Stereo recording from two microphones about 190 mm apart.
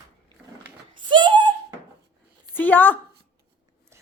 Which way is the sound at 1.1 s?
25° right (ahead or behind).